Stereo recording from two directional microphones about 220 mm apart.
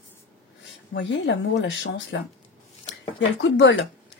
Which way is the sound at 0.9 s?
55° left (ahead or behind).